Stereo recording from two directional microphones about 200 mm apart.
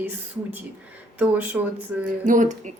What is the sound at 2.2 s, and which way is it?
Speech, 40° right (ahead or behind).